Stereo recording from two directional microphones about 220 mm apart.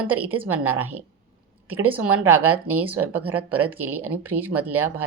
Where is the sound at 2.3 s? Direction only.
80° right.